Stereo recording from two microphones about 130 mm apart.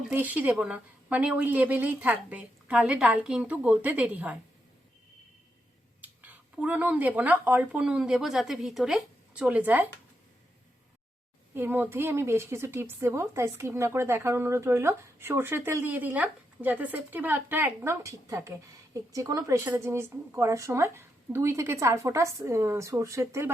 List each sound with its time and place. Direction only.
0.1 s a woman's voice: 10° right (ahead or behind)
6.0 s speech: 10° right (ahead or behind)
11.5 s a woman's voice: 15° right (ahead or behind)